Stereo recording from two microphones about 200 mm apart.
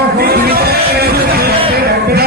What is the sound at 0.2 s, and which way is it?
Music, 50° right (ahead or behind).